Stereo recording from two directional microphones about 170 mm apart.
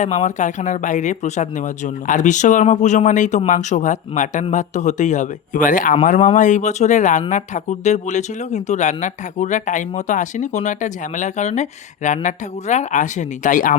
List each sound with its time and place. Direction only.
0.0 s speech: 45° left (ahead or behind)